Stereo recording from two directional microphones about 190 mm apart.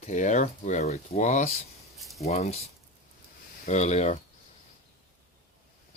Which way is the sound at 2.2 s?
35° left (ahead or behind).